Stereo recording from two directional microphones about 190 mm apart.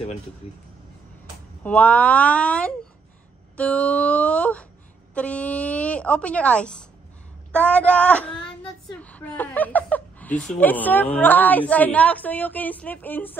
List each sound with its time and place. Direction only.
1.6 s a woman's voice: 5° left (ahead or behind)